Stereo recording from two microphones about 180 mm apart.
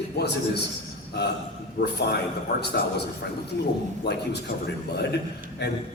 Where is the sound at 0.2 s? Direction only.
65° left (ahead or behind).